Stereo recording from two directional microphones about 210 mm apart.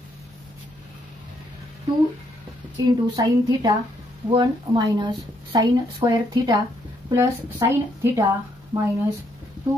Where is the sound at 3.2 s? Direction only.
15° right (ahead or behind).